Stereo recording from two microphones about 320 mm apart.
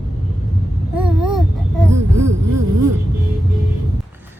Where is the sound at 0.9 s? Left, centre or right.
Centre.